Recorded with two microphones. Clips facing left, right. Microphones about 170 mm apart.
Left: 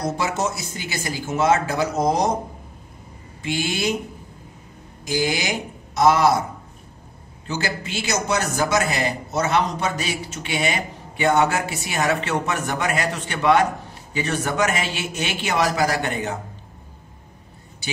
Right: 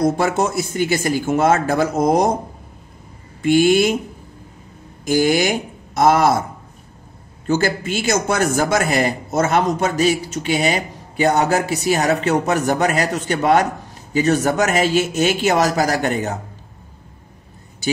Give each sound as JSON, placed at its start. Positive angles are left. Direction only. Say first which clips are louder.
{"t": 0.0, "sound": "a man's voice", "louder": "right 6 dB", "side_deg": -55}
{"t": 3.4, "sound": "a man's voice", "louder": "right 11 dB", "side_deg": -50}
{"t": 5.0, "sound": "speech", "louder": "right 7 dB", "side_deg": -50}
{"t": 7.4, "sound": "a man's voice", "louder": "right 8 dB", "side_deg": -50}